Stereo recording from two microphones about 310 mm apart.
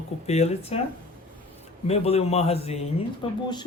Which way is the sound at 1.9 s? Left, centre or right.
Centre.